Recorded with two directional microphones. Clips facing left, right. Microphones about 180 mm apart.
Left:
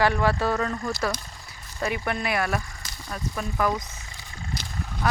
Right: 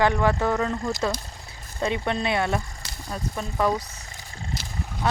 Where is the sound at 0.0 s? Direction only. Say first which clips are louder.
Right 1 dB; 20° right (ahead or behind).